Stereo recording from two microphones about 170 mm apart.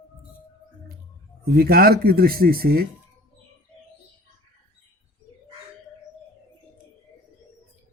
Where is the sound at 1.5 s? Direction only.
65° right (ahead or behind).